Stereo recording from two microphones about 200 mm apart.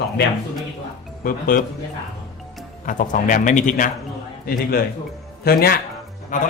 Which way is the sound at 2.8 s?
40° left (ahead or behind).